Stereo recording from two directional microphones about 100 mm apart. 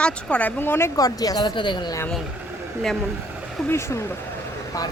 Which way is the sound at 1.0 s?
40° left (ahead or behind).